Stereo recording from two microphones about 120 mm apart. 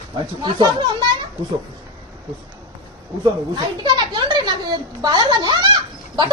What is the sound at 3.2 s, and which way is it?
A woman's voice, 35° right (ahead or behind).